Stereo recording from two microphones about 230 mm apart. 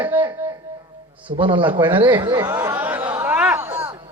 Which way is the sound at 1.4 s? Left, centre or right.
Right.